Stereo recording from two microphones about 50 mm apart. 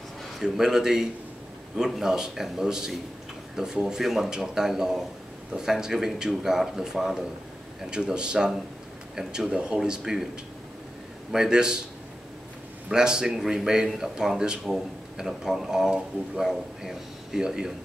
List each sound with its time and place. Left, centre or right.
0.4 s speech: centre
11.3 s speech: centre
12.9 s speech: centre